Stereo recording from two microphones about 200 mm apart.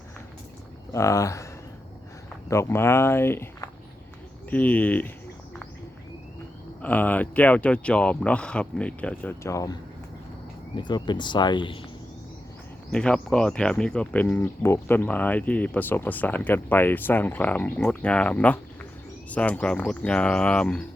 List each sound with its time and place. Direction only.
0.9 s speech: 15° left (ahead or behind)
2.5 s speech: 15° left (ahead or behind)
6.8 s speech: 10° left (ahead or behind)
10.8 s speech: 20° left (ahead or behind)
12.9 s speech: 5° left (ahead or behind)